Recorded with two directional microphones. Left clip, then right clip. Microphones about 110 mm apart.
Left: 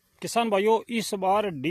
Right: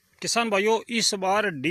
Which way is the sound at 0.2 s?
20° left (ahead or behind).